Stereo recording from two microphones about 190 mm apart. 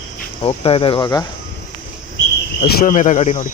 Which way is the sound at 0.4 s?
30° left (ahead or behind).